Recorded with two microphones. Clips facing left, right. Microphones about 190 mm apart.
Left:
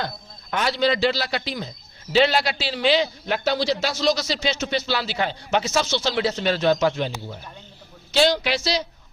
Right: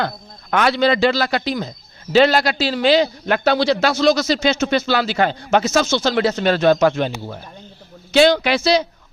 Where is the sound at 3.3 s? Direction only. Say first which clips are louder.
Right 6 dB; 60° right (ahead or behind).